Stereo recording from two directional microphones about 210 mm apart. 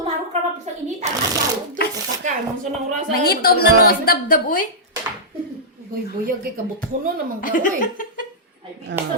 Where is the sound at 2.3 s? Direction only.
35° right (ahead or behind).